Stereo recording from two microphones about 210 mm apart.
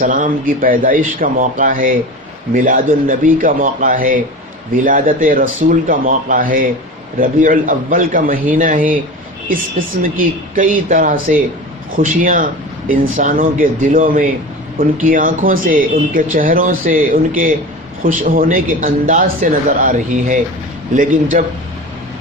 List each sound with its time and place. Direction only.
0.0 s speech: 40° right (ahead or behind)
10.0 s speech: 40° right (ahead or behind)